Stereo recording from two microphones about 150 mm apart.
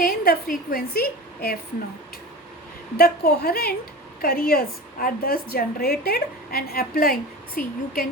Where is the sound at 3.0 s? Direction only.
90° left.